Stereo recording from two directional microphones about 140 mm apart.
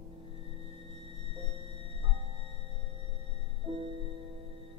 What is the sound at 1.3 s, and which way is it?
Music, 45° right (ahead or behind).